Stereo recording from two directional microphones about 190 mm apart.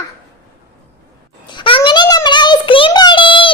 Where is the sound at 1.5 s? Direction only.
25° left (ahead or behind).